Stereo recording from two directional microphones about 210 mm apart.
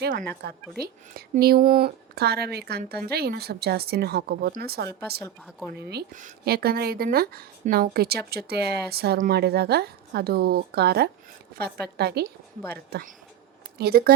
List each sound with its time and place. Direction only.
0.0 s speech: 40° right (ahead or behind)